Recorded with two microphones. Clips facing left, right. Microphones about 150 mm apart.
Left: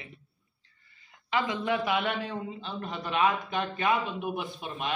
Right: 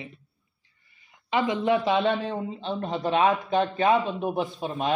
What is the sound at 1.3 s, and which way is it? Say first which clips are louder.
A man's voice: right 5 dB; 20° right (ahead or behind).